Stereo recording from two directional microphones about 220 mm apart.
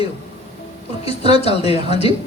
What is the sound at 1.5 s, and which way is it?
Speech, 25° left (ahead or behind).